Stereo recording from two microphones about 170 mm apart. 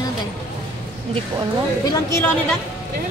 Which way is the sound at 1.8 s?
20° left (ahead or behind).